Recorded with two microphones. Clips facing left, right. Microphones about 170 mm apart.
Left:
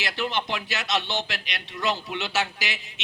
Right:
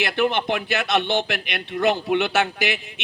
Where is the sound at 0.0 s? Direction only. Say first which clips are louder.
Right 7 dB; 55° right (ahead or behind).